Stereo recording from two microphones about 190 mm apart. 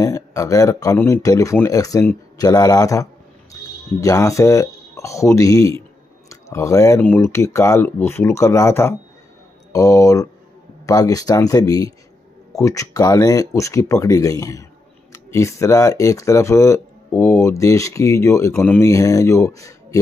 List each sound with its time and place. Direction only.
0.0 s speech: 15° left (ahead or behind)